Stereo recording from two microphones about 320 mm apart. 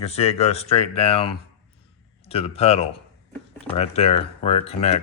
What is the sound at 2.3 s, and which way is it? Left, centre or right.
Speech, centre.